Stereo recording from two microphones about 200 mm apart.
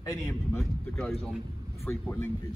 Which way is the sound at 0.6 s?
Centre (ahead or behind).